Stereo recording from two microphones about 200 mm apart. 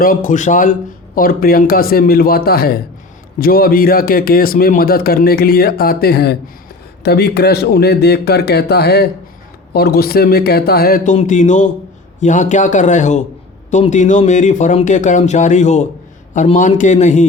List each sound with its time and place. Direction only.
0.0 s speech: 45° left (ahead or behind)